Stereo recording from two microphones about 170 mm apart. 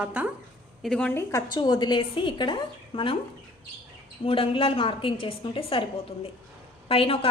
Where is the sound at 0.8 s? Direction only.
5° left (ahead or behind).